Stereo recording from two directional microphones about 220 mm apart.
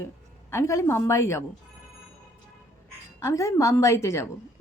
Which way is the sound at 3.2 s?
15° left (ahead or behind).